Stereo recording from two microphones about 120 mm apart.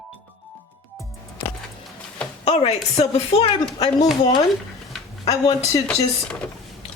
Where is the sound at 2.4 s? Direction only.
60° left (ahead or behind).